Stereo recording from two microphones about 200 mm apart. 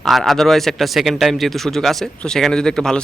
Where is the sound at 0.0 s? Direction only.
Centre (ahead or behind).